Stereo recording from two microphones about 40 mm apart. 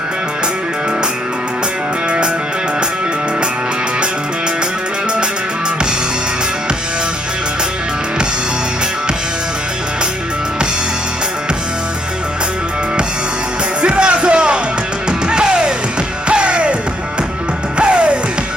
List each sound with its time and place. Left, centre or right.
2.0 s music: right
13.8 s music: right
17.7 s music: right